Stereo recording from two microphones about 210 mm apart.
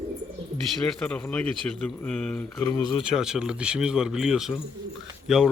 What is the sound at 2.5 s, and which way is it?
Speech, 20° left (ahead or behind).